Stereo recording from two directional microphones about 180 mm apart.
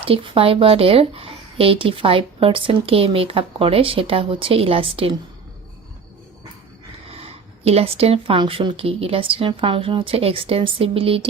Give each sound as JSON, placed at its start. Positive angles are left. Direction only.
{"t": 0.0, "sound": "speech", "side_deg": -30}
{"t": 7.2, "sound": "speech", "side_deg": -35}